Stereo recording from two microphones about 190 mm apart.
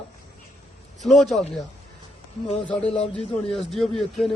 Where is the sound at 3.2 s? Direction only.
Centre (ahead or behind).